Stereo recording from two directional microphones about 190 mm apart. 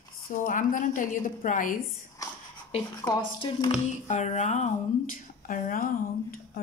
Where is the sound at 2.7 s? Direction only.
25° left (ahead or behind).